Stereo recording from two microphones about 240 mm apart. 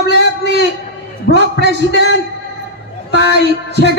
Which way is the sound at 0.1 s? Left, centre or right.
Left.